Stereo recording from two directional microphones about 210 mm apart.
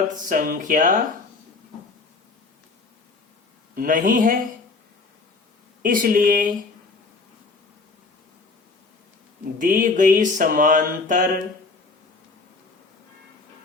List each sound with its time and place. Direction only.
0.3 s mantra: 40° right (ahead or behind)
3.8 s mantra: 40° right (ahead or behind)
5.8 s mantra: 40° right (ahead or behind)
9.6 s mantra: 40° right (ahead or behind)